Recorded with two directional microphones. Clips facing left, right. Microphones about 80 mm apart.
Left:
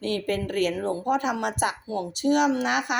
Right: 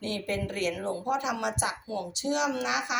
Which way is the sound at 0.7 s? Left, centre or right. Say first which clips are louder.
Left 5 dB; left.